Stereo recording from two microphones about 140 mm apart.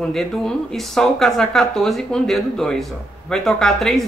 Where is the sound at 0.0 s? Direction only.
Centre (ahead or behind).